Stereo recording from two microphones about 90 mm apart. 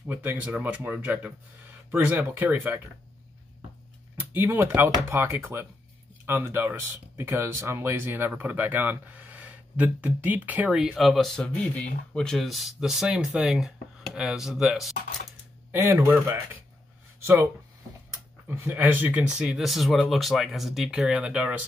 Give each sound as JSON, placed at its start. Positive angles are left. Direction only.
{"t": 0.0, "sound": "speech", "side_deg": -20}
{"t": 4.2, "sound": "speech", "side_deg": -20}
{"t": 10.7, "sound": "speech", "side_deg": -5}
{"t": 15.7, "sound": "speech", "side_deg": -25}
{"t": 18.5, "sound": "speech", "side_deg": -20}
{"t": 21.1, "sound": "speech", "side_deg": -15}